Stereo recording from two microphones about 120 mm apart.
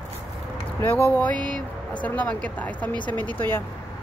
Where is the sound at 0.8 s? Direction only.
20° left (ahead or behind).